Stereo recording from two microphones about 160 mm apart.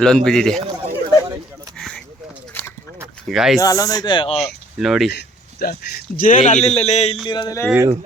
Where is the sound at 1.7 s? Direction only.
5° left (ahead or behind).